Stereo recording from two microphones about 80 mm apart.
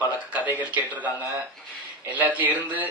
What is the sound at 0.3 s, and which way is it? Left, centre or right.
A man's voice, right.